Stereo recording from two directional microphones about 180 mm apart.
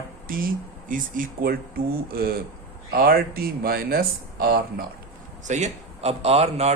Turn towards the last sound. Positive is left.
turn(degrees=-35)  # may be behind; listen again after turning